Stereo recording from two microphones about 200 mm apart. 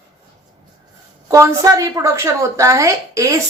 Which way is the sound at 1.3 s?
15° right (ahead or behind).